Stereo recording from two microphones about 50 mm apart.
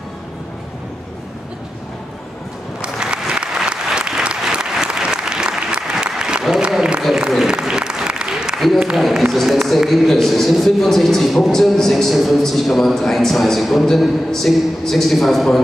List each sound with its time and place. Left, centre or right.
2.8 s applause: centre
8.9 s a man's voice: centre